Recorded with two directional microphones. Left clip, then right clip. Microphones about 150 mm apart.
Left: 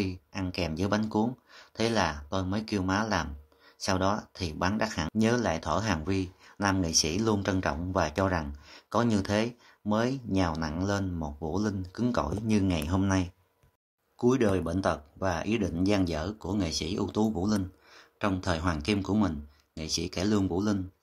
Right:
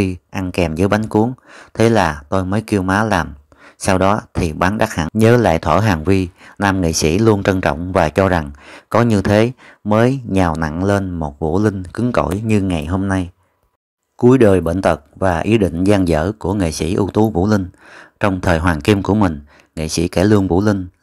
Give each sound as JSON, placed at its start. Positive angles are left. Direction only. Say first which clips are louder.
{"t": 0.0, "sound": "speech", "louder": "right 13 dB", "side_deg": -55}
{"t": 14.1, "sound": "speech", "louder": "right 15 dB", "side_deg": -45}